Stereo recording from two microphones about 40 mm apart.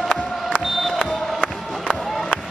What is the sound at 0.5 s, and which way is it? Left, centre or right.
Crowd, left.